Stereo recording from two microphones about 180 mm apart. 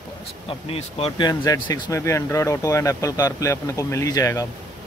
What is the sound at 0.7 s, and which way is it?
Speech, 30° left (ahead or behind).